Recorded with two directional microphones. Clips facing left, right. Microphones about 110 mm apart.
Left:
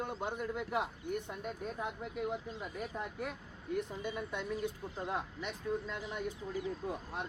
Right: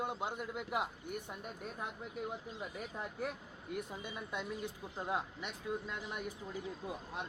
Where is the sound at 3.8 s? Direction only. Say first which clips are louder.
Left 5 dB; 10° right (ahead or behind).